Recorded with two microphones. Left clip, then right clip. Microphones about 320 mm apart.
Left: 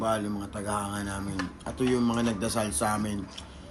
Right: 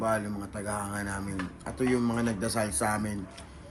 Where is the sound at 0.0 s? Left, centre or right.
Centre.